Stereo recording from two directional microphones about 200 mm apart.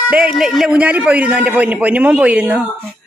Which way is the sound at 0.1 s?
5° right (ahead or behind).